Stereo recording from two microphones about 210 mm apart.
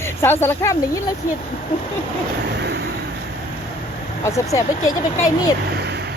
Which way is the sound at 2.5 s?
55° right (ahead or behind).